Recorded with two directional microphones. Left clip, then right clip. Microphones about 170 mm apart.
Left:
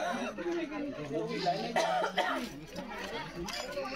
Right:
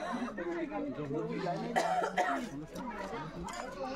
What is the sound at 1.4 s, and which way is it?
Speech, 30° right (ahead or behind).